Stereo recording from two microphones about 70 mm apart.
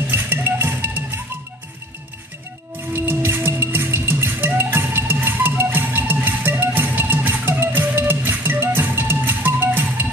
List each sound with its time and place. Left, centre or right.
0.0 s music: right
2.9 s music: right